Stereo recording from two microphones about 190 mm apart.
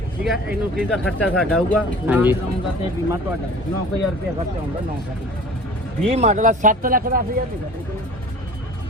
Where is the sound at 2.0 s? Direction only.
10° right (ahead or behind).